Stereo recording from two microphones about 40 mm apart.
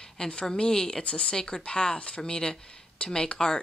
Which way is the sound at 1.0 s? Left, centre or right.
Left.